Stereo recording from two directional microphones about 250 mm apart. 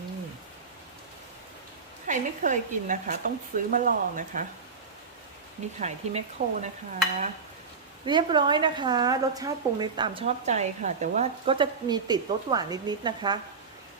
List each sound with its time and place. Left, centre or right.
2.0 s speech: right
5.8 s speech: right
8.0 s a woman's voice: centre